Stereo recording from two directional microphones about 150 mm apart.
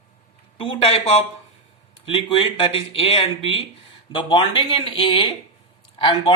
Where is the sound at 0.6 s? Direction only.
35° left (ahead or behind).